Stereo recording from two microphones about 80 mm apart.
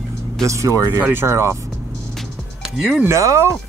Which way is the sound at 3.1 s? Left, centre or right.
Right.